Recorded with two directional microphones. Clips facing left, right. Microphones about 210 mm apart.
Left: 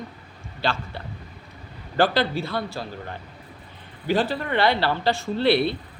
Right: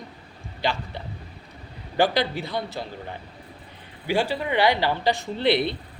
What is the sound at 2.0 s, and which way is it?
Speech, 15° right (ahead or behind).